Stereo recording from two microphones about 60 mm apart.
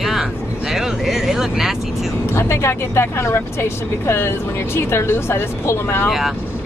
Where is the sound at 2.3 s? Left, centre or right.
Left.